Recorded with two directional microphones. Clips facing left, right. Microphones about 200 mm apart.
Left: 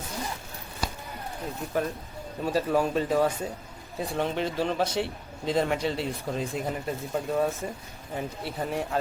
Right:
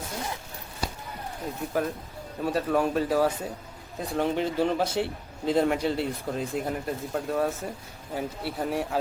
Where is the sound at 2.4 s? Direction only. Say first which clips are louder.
Even; centre (ahead or behind).